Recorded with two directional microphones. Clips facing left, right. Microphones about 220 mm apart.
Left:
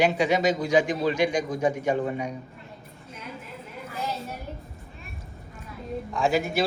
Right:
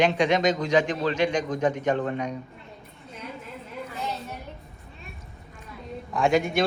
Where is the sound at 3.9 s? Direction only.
Centre (ahead or behind).